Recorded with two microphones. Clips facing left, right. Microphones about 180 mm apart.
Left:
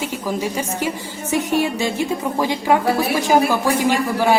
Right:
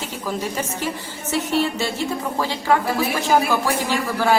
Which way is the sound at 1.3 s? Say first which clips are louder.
Left 2 dB; 15° left (ahead or behind).